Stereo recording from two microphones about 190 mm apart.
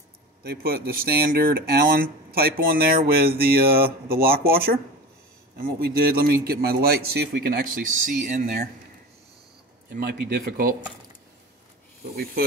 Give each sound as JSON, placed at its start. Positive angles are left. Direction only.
{"t": 0.4, "sound": "speech", "side_deg": -55}
{"t": 9.8, "sound": "speech", "side_deg": -55}